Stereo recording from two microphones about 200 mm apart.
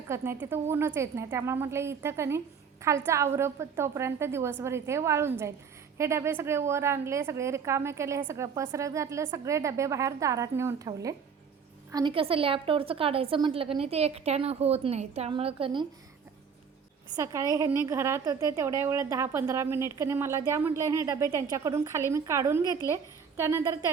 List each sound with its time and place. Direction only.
0.1 s a woman's voice: 15° right (ahead or behind)
17.2 s a woman's voice: 15° right (ahead or behind)